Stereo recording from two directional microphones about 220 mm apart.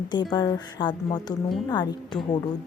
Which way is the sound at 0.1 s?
20° left (ahead or behind).